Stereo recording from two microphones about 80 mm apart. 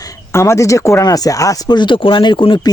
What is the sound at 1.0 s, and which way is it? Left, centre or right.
Speech, left.